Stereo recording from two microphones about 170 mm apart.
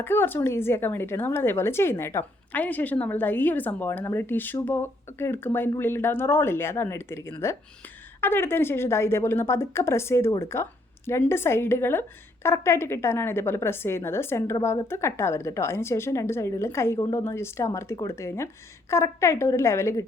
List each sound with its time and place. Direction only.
0.0 s a woman's voice: 15° left (ahead or behind)